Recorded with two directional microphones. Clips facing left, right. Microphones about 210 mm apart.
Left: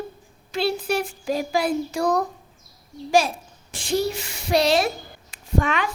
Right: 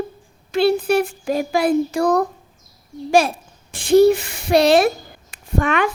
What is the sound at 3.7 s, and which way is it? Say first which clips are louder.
Speech: right 12 dB; 60° right (ahead or behind).